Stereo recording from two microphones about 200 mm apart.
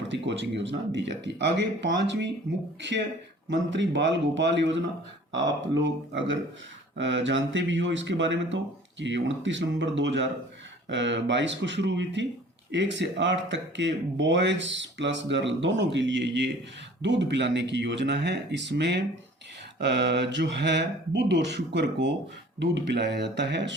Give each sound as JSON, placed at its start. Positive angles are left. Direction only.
{"t": 0.1, "sound": "speech", "side_deg": -60}
{"t": 3.5, "sound": "speech", "side_deg": -65}
{"t": 5.8, "sound": "speech", "side_deg": -65}